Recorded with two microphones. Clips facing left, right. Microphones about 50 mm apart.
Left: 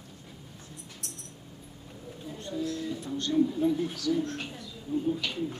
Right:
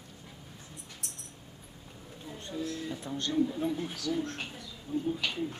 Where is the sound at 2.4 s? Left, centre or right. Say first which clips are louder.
Left 3 dB; centre.